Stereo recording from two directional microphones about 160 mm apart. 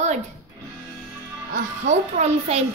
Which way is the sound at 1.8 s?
45° right (ahead or behind).